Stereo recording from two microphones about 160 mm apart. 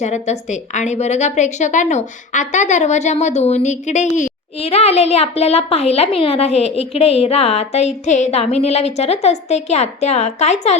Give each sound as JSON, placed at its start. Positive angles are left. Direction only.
{"t": 0.0, "sound": "a woman's voice", "side_deg": 45}